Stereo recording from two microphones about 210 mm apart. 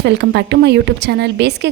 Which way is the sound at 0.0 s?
55° right (ahead or behind).